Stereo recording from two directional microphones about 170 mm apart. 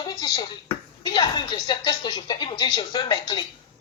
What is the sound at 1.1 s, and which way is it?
Speech, 25° left (ahead or behind).